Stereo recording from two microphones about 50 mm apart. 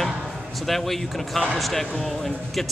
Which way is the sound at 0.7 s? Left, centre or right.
Centre.